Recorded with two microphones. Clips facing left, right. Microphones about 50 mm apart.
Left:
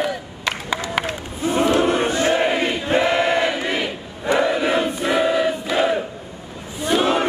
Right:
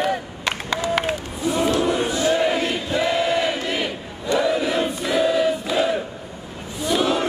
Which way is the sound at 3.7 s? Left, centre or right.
Left.